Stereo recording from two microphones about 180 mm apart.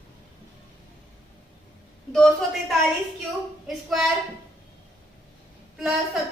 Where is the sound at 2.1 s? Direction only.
Centre (ahead or behind).